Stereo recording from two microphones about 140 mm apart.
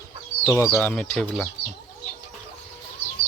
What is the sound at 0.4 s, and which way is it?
Speech, 20° left (ahead or behind).